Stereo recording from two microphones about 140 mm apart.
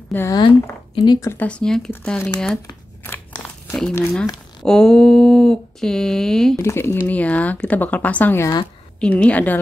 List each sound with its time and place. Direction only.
0.1 s speech: 20° left (ahead or behind)
1.0 s speech: 30° left (ahead or behind)
1.3 s speech: 10° left (ahead or behind)
3.9 s speech: 5° left (ahead or behind)
4.6 s a sound: 5° left (ahead or behind)
6.6 s speech: 20° left (ahead or behind)